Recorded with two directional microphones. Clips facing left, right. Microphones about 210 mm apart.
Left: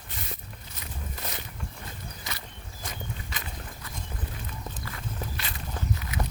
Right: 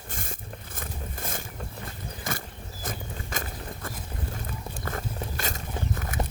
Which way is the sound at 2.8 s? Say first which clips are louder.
Right 3 dB; 50° right (ahead or behind).